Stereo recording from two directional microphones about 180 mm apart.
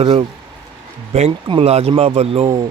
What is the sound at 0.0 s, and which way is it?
Speech, 35° right (ahead or behind).